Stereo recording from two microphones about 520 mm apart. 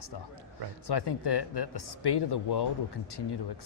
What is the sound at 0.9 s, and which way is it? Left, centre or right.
Speech, left.